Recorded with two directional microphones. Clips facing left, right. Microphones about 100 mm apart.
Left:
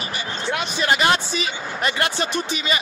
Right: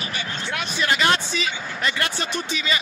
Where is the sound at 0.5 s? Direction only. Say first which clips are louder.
Left 2 dB; 25° left (ahead or behind).